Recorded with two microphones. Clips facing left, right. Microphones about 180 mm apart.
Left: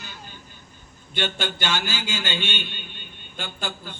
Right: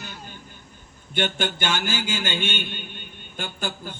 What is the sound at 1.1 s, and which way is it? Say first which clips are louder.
A man's voice: right 2 dB; 50° right (ahead or behind).